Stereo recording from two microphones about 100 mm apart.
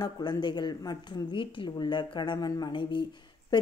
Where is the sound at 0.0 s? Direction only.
45° left (ahead or behind).